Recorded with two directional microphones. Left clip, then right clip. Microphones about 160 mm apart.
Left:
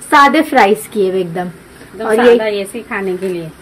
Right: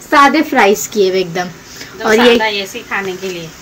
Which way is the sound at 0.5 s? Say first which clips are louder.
Even; 20° left (ahead or behind).